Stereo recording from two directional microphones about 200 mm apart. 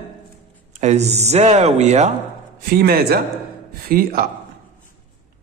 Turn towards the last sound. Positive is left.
turn(degrees=-45)  # may be behind; listen again after turning